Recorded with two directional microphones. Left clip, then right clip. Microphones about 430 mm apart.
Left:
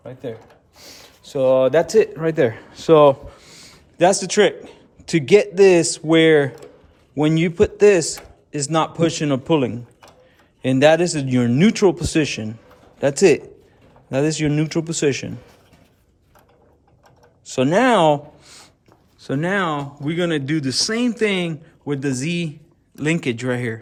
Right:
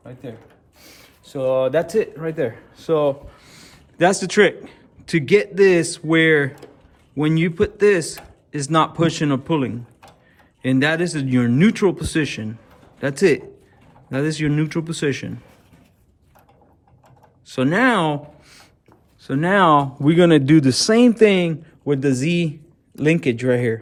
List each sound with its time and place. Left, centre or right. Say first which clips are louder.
0.0 s speech: left 5 dB; centre
3.4 s a man's voice: left 2 dB; centre
17.4 s a sound: left 1 dB; centre
19.2 s speech: right 5 dB; centre